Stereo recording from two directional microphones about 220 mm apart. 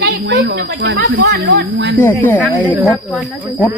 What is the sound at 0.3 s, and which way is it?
Speech, 50° right (ahead or behind).